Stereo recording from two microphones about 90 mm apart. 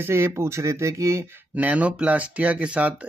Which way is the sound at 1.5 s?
15° right (ahead or behind).